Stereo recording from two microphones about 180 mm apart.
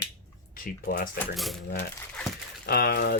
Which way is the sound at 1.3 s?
Centre (ahead or behind).